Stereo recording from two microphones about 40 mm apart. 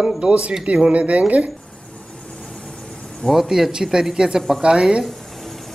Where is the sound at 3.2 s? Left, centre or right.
Centre.